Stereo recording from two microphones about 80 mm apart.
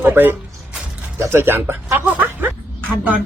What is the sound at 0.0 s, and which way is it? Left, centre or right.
A woman's voice, right.